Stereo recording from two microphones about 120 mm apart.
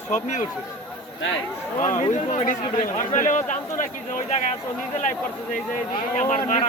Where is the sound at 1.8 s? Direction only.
90° left.